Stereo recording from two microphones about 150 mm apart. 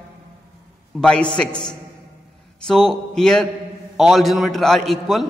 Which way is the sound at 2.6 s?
Centre (ahead or behind).